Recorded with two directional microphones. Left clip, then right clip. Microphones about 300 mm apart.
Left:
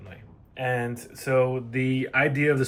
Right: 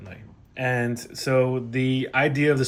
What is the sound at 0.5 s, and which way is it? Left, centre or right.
Speech, right.